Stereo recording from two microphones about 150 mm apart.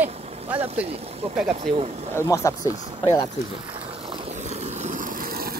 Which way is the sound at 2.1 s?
20° left (ahead or behind).